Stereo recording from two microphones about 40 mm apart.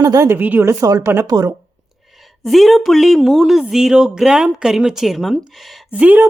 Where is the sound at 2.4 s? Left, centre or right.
Centre.